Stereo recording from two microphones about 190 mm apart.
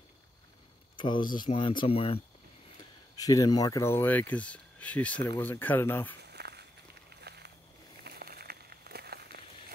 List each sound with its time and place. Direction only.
0.9 s speech: 25° left (ahead or behind)
3.2 s speech: 20° left (ahead or behind)
6.2 s walk: 60° right (ahead or behind)
7.2 s a sound: 60° right (ahead or behind)